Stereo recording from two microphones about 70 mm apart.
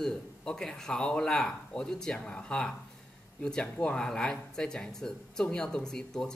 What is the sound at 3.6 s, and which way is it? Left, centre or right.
Speech, left.